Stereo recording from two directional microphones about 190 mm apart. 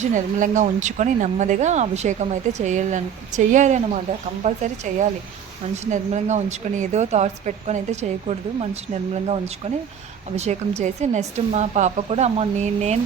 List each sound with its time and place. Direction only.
0.0 s speech: 40° right (ahead or behind)